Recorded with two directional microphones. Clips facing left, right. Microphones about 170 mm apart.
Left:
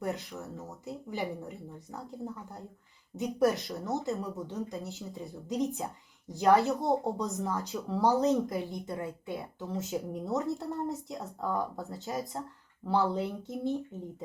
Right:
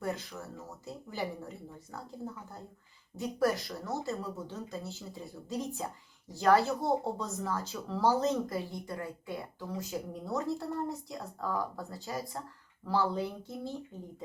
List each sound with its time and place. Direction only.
0.0 s speech: 20° left (ahead or behind)